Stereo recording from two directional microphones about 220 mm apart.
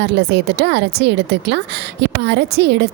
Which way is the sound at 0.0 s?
50° right (ahead or behind).